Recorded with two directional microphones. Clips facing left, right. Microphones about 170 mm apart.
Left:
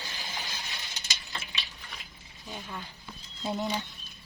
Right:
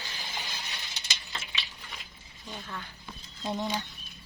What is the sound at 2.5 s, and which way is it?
Speech, 15° left (ahead or behind).